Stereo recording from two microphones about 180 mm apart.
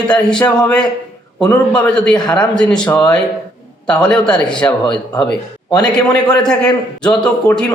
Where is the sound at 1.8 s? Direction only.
5° left (ahead or behind).